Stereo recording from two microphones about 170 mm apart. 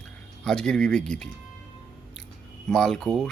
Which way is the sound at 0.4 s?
5° left (ahead or behind).